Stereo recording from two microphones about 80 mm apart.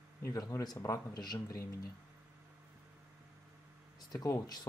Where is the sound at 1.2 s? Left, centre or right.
Left.